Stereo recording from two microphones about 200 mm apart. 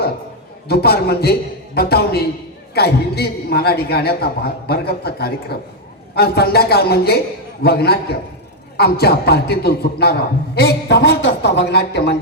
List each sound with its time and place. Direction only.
0.7 s a man's voice: 55° left (ahead or behind)